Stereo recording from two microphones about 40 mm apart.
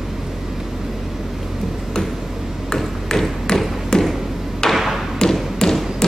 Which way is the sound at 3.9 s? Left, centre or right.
Centre.